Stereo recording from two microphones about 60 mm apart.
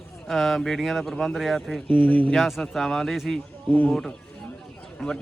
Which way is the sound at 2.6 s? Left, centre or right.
Centre.